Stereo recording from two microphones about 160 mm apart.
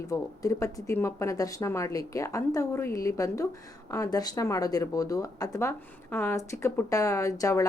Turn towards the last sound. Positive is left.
turn(degrees=20)  # may be behind; listen again after turning